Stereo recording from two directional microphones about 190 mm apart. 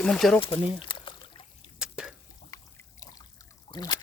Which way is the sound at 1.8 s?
5° right (ahead or behind).